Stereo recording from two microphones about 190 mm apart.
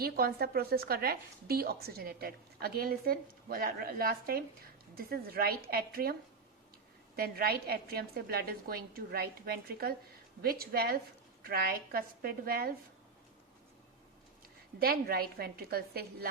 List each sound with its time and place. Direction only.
0.0 s a woman's voice: 50° right (ahead or behind)
7.2 s a woman's voice: 50° right (ahead or behind)
14.8 s a woman's voice: 55° right (ahead or behind)